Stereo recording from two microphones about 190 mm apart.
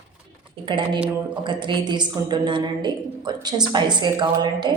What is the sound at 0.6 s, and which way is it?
A woman's voice, 25° right (ahead or behind).